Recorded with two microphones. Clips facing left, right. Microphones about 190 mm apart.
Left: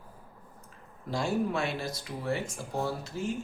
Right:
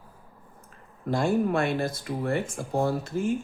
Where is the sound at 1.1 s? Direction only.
55° right (ahead or behind).